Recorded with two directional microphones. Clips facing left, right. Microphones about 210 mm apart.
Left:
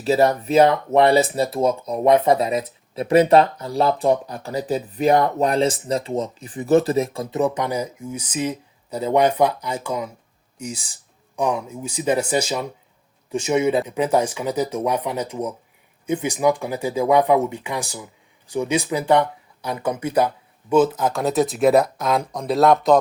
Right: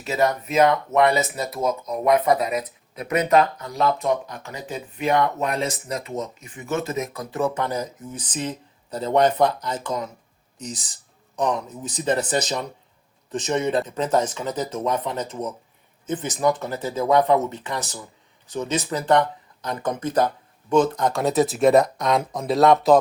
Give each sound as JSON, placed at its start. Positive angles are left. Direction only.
{"t": 0.0, "sound": "speech", "side_deg": 30}